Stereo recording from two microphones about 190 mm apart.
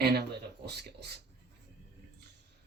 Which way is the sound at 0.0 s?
55° right (ahead or behind).